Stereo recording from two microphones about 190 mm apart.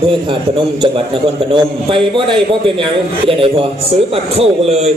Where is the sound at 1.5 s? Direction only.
25° right (ahead or behind).